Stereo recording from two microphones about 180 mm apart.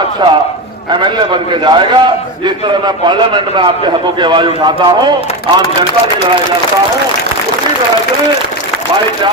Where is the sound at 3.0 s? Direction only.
25° right (ahead or behind).